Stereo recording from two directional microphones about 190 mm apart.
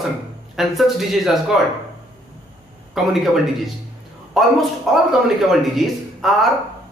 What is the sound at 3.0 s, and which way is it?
Speech, centre (ahead or behind).